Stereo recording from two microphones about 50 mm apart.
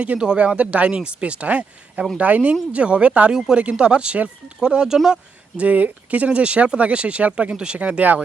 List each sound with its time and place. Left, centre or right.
0.3 s speech: right
3.3 s speech: centre
3.6 s speech: right
5.5 s speech: right
7.5 s speech: centre